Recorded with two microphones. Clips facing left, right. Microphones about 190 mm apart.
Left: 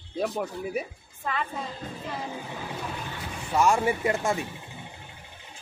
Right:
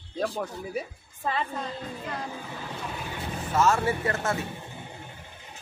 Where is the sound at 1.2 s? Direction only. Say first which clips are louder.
Right 2 dB; 30° right (ahead or behind).